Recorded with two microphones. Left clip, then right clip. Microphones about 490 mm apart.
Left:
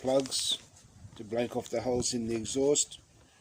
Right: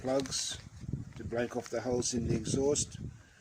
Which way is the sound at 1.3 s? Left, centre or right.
Right.